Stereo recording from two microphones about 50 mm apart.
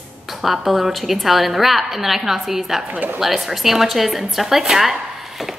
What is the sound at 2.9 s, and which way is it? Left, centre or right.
Speech, right.